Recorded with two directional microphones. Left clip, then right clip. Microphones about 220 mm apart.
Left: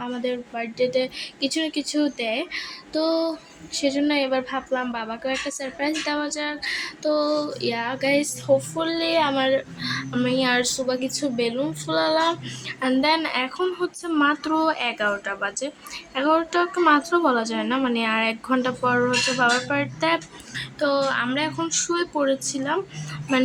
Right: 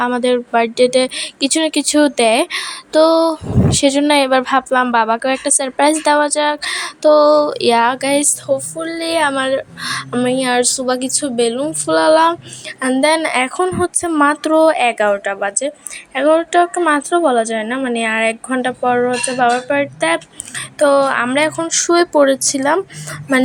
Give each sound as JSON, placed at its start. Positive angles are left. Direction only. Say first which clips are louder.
{"t": 0.0, "sound": "a woman's voice", "louder": "right 13 dB", "side_deg": -35}
{"t": 20.7, "sound": "speech", "louder": "right 10 dB", "side_deg": -30}